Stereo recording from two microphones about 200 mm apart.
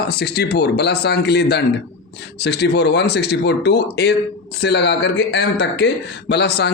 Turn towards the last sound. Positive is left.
turn(degrees=55)  # may be behind; listen again after turning